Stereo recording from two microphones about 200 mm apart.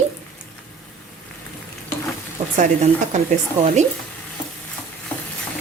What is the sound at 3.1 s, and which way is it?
Speech, 35° right (ahead or behind).